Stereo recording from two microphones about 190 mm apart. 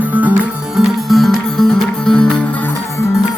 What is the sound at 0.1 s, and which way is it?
Music, 10° right (ahead or behind).